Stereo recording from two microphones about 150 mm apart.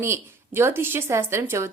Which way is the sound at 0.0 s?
15° right (ahead or behind).